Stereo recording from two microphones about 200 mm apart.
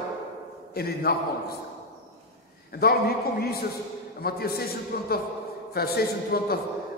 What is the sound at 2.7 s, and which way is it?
A man's voice, 50° left (ahead or behind).